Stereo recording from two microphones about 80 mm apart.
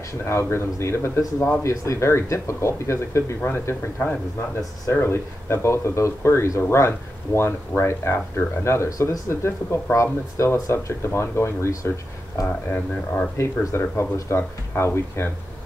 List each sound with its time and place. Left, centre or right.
0.2 s speech: left
12.4 s speech: centre
13.4 s speech: left